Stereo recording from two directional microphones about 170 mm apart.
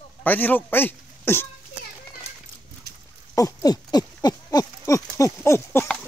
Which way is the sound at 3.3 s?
20° left (ahead or behind).